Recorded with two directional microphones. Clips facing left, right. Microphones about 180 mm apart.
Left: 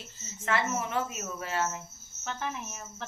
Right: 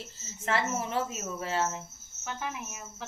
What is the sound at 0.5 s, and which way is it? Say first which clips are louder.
A woman's voice: even; 30° right (ahead or behind).